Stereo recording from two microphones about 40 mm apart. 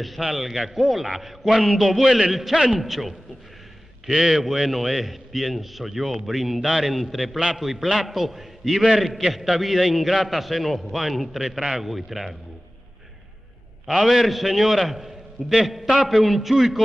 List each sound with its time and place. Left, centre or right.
0.2 s a man's voice: centre
4.3 s a man's voice: centre
13.8 s a man's voice: centre